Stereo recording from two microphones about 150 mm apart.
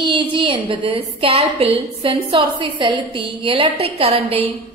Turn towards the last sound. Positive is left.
turn(degrees=-40)  # may be behind; listen again after turning